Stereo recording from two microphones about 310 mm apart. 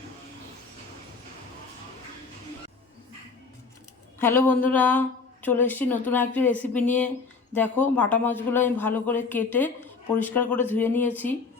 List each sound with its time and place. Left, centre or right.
4.2 s speech: centre